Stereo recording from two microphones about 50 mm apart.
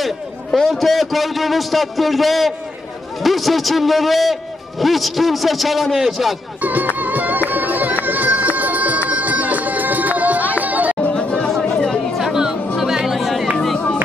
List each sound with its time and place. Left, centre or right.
0.0 s a man's voice: centre
6.6 s music: right
11.3 s a sound: centre
11.6 s chatter: centre
12.3 s music: centre